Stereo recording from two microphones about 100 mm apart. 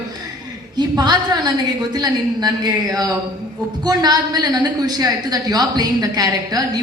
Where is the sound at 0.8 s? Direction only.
45° right (ahead or behind).